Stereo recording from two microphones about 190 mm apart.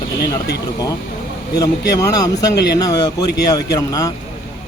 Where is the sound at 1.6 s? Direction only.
20° left (ahead or behind).